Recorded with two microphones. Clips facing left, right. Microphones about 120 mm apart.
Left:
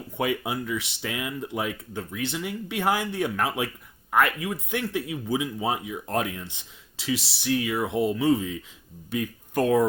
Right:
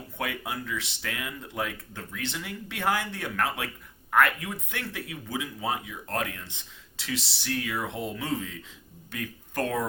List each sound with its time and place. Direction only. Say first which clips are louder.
0.2 s speech: left 6 dB; 15° left (ahead or behind)